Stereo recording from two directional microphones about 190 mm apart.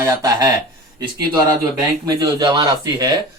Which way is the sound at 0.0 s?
20° right (ahead or behind).